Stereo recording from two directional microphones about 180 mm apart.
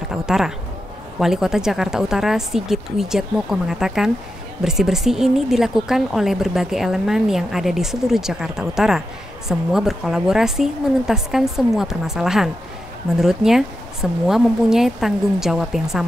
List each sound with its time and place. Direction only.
0.1 s speech: 5° right (ahead or behind)